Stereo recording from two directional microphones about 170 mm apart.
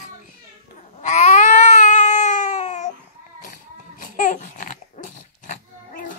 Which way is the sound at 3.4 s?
50° left (ahead or behind).